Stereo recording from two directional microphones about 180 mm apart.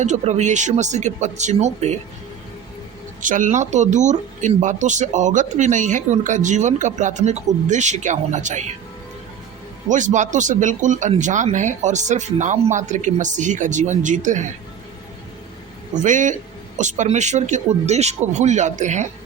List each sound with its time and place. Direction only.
0.0 s speech: 40° right (ahead or behind)
3.2 s speech: 45° right (ahead or behind)
9.9 s speech: 45° right (ahead or behind)
16.0 s speech: 45° right (ahead or behind)